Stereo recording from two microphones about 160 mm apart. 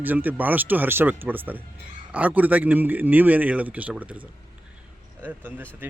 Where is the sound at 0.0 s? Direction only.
10° right (ahead or behind).